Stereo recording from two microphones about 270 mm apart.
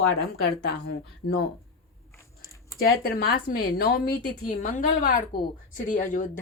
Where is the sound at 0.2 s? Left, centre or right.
Left.